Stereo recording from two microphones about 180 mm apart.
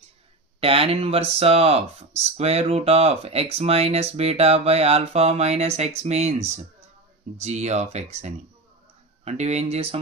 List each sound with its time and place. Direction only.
0.6 s speech: 30° right (ahead or behind)